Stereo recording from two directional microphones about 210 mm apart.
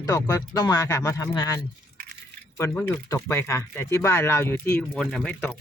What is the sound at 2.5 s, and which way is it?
Speech, 10° left (ahead or behind).